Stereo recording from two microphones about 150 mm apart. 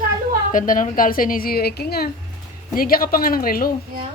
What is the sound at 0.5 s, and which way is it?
A woman's voice, 60° left (ahead or behind).